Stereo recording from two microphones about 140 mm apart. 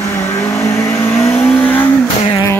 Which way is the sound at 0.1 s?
15° left (ahead or behind).